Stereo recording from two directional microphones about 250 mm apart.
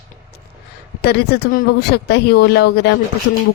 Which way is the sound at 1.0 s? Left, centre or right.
Left.